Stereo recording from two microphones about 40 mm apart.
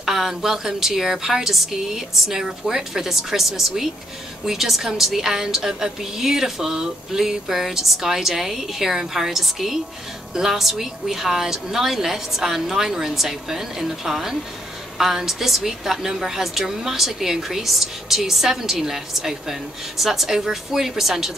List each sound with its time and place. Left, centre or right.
0.0 s a woman's voice: centre